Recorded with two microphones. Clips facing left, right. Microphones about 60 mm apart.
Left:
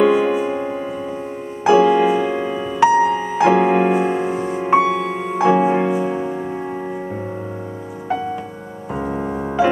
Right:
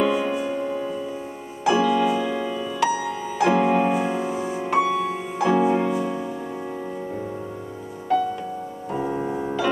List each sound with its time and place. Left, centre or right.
0.0 s music: left
4.6 s music: left
9.0 s music: left